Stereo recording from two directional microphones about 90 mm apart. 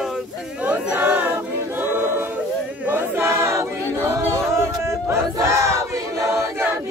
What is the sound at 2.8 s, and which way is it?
Choir, 25° right (ahead or behind).